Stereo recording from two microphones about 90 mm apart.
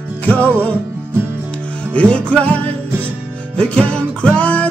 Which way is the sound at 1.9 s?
15° left (ahead or behind).